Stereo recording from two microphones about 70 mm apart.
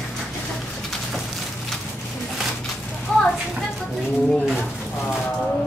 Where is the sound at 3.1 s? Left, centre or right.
Centre.